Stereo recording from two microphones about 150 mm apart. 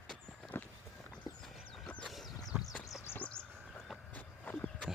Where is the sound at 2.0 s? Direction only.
Centre (ahead or behind).